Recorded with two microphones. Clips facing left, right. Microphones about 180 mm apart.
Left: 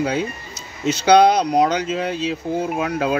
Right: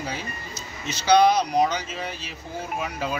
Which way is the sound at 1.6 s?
70° left (ahead or behind).